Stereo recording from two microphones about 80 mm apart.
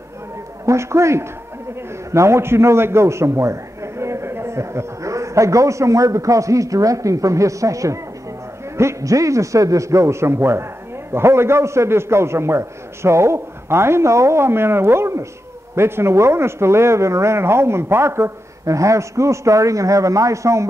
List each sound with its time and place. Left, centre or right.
0.7 s a man's voice: right